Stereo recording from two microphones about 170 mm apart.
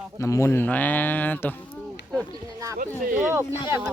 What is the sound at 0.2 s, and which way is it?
Speech, 15° left (ahead or behind).